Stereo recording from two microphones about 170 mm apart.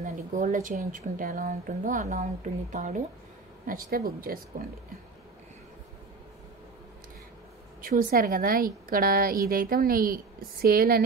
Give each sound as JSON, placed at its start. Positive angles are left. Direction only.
{"t": 0.0, "sound": "a woman's voice", "side_deg": -50}
{"t": 7.8, "sound": "a woman's voice", "side_deg": -55}